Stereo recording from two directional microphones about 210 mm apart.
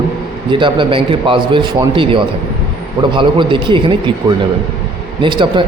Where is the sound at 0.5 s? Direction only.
25° right (ahead or behind).